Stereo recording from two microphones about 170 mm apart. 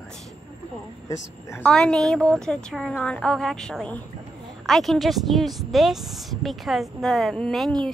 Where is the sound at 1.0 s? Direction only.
20° left (ahead or behind).